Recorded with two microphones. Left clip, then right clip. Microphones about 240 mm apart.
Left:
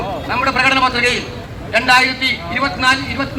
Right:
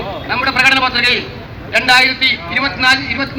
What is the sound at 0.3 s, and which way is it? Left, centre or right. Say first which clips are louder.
A man's voice: right 3 dB; left.